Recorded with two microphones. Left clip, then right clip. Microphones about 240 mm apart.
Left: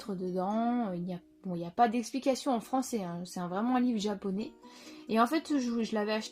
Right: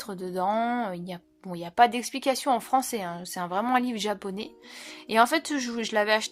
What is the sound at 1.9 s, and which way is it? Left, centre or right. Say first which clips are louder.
Speech: right 4 dB; right.